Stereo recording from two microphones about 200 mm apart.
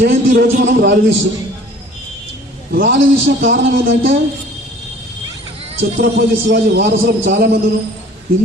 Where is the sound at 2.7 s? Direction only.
45° right (ahead or behind).